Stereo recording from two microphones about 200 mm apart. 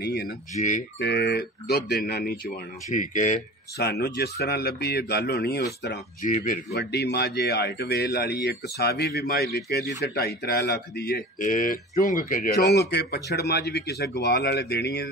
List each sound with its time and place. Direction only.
0.0 s speech: 55° left (ahead or behind)
0.6 s speech: 40° left (ahead or behind)
0.9 s speech: 55° left (ahead or behind)
2.9 s speech: 40° left (ahead or behind)
3.7 s speech: 55° left (ahead or behind)
6.3 s speech: 45° left (ahead or behind)